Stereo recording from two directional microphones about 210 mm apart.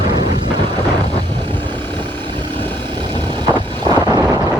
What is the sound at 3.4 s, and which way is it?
Vehicle, 20° right (ahead or behind).